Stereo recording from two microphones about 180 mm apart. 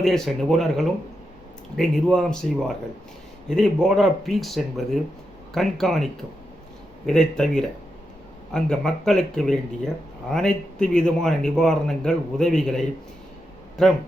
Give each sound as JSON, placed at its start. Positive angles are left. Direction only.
{"t": 0.0, "sound": "speech", "side_deg": 0}